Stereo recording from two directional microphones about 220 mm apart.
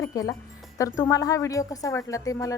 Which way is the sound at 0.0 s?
15° left (ahead or behind).